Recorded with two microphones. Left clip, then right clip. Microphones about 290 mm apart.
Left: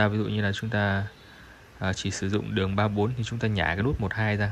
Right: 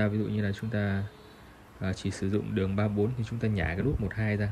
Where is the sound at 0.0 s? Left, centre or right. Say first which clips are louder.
Left 5 dB; centre.